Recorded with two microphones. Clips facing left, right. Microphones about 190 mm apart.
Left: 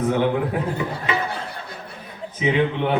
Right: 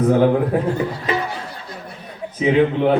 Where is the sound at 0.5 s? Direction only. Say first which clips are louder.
Right 5 dB; 40° right (ahead or behind).